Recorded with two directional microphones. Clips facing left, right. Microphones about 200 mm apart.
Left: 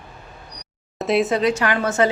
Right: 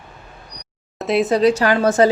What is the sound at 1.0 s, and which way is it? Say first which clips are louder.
Speech: right 2 dB; centre (ahead or behind).